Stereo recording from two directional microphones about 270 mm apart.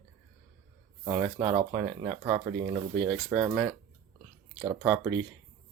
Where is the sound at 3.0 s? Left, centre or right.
Centre.